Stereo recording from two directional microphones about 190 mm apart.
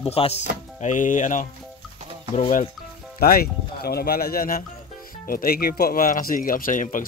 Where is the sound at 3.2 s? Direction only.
55° left (ahead or behind).